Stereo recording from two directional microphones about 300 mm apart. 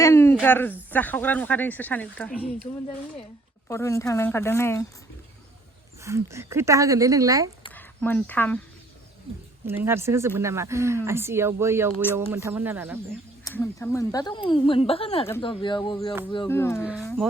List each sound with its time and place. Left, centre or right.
0.0 s a sound: centre
0.3 s a woman's voice: centre
3.7 s speech: centre
6.0 s speech: centre
7.7 s speech: centre
9.6 s speech: centre
13.4 s speech: centre
16.8 s speech: centre